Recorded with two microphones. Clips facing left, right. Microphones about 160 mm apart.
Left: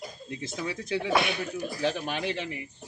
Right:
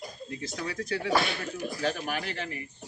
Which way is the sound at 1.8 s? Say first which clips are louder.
Left 2 dB; 20° left (ahead or behind).